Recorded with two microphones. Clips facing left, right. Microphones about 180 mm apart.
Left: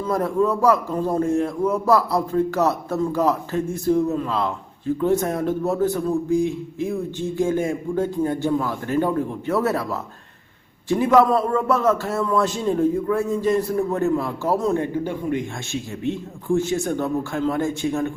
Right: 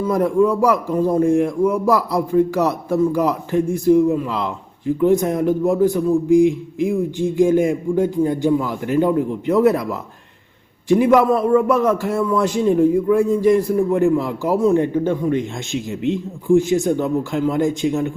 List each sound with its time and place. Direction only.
0.1 s a man's voice: 15° right (ahead or behind)